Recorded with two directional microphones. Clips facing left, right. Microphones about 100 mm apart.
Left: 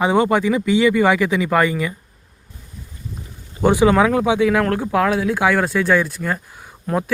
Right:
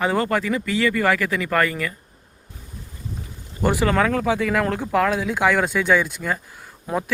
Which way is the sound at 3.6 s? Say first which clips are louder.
Left 5 dB; 5° left (ahead or behind).